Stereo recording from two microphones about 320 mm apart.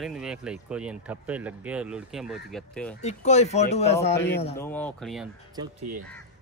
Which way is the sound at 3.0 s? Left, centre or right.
Left.